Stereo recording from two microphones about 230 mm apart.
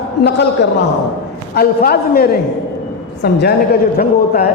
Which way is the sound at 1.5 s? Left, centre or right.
Left.